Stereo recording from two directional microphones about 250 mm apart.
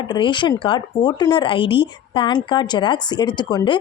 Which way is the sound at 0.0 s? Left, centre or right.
Centre.